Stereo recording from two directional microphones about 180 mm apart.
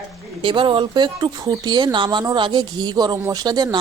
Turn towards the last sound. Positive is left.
turn(degrees=-20)  # may be behind; listen again after turning